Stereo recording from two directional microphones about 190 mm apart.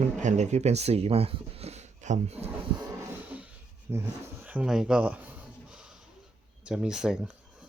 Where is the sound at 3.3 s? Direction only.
10° right (ahead or behind).